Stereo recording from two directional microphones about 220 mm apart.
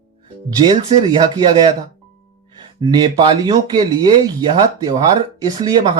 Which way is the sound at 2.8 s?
20° right (ahead or behind).